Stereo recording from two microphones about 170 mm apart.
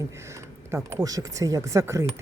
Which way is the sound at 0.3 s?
15° right (ahead or behind).